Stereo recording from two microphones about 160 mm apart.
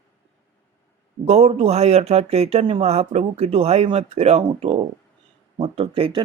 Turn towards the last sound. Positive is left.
turn(degrees=-35)  # may be behind; listen again after turning